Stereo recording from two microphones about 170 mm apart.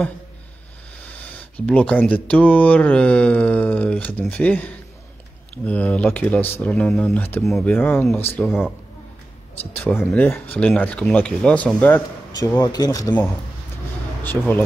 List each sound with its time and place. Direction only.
1.0 s speech: 10° left (ahead or behind)
9.8 s speech: 10° left (ahead or behind)
12.5 s speech: 20° left (ahead or behind)
14.4 s speech: centre (ahead or behind)